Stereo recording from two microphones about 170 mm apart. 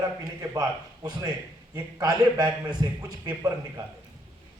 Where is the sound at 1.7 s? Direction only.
20° right (ahead or behind).